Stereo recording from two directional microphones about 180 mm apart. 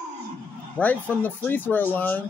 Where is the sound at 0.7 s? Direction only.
10° left (ahead or behind).